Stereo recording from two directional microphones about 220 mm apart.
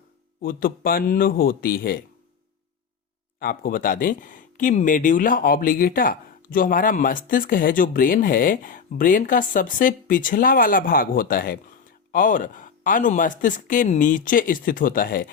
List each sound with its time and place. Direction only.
0.4 s speech: 40° left (ahead or behind)
3.4 s speech: 40° left (ahead or behind)